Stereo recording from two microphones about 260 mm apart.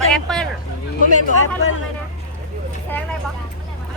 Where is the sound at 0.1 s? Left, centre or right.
Centre.